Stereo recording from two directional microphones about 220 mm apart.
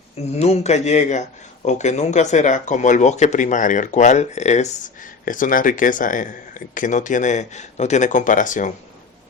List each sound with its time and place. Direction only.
0.3 s speech: 30° left (ahead or behind)